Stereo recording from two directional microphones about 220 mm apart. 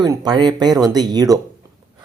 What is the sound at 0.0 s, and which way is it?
Speech, 15° right (ahead or behind).